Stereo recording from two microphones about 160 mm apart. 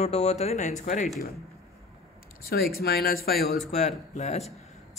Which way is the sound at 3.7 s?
45° left (ahead or behind).